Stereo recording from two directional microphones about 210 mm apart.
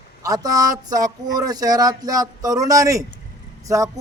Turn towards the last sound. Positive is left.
turn(degrees=-15)  # may be behind; listen again after turning